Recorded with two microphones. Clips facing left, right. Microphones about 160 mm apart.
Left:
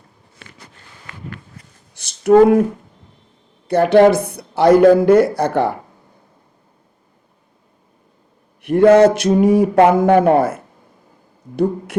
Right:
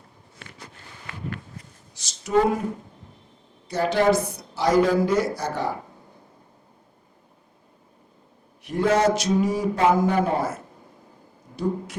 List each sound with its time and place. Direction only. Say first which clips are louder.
2.0 s a sound: left 11 dB; 60° left (ahead or behind)
3.7 s speech: left 10 dB; 60° left (ahead or behind)
8.6 s speech: left 11 dB; 60° left (ahead or behind)